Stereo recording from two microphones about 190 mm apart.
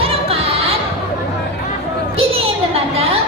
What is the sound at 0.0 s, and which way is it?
Music, 30° right (ahead or behind).